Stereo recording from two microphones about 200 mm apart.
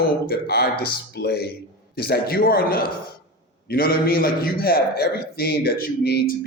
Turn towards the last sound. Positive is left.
turn(degrees=50)  # may be behind; listen again after turning